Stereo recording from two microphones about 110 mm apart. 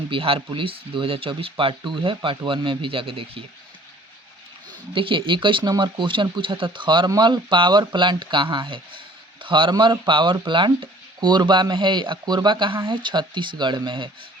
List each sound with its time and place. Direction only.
0.1 s speech: 55° right (ahead or behind)
4.9 s speech: 50° right (ahead or behind)